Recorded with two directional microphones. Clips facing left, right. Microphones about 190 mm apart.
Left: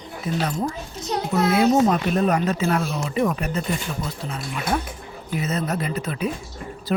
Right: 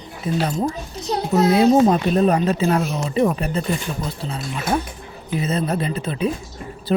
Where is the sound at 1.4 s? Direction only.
30° right (ahead or behind).